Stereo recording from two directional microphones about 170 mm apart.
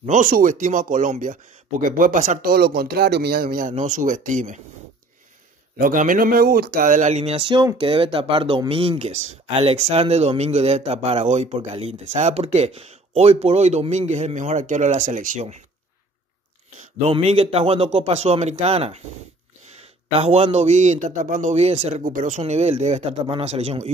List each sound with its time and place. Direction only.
0.0 s speech: 50° right (ahead or behind)
2.5 s speech: 70° right (ahead or behind); by 4.6 s 50° right (ahead or behind)
5.8 s speech: 50° right (ahead or behind)
17.0 s speech: 35° right (ahead or behind)
20.1 s speech: 35° right (ahead or behind)
22.0 s speech: 50° right (ahead or behind)